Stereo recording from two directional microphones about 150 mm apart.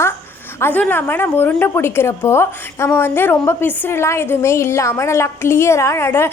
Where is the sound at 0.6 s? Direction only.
10° left (ahead or behind).